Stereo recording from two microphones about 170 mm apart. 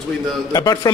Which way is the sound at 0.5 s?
20° left (ahead or behind).